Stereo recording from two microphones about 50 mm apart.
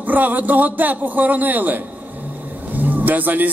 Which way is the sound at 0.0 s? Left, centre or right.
Right.